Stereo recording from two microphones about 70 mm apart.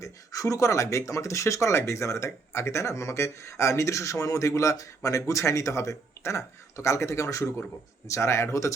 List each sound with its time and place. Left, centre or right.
0.0 s speech: left